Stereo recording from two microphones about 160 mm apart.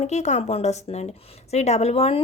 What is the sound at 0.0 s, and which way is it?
A woman's voice, 45° left (ahead or behind).